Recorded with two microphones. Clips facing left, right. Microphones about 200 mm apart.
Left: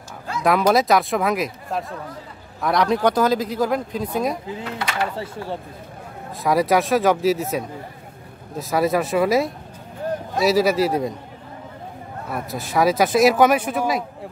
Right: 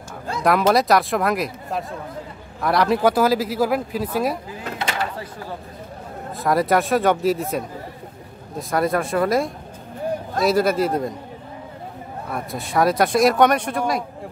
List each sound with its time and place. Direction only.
0.4 s speech: centre (ahead or behind)
5.1 s speech: 25° left (ahead or behind)
6.3 s speech: centre (ahead or behind)
12.3 s speech: centre (ahead or behind)